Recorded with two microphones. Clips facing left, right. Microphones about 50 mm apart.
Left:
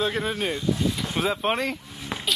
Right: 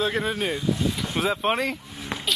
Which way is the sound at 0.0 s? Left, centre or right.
Centre.